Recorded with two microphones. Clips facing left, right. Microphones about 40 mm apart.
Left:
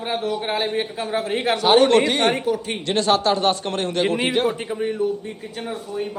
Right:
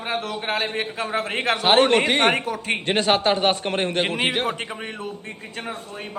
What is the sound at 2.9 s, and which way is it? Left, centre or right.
A man's voice, right.